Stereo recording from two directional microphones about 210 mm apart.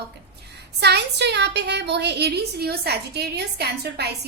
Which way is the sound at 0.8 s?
50° right (ahead or behind).